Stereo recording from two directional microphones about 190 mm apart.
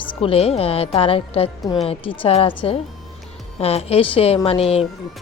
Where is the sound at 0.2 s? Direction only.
30° left (ahead or behind).